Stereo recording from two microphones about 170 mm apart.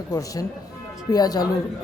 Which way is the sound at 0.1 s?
20° left (ahead or behind).